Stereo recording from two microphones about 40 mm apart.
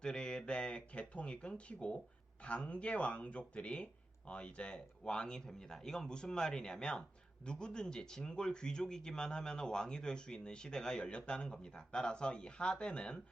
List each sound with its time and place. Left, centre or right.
0.0 s a man's voice: left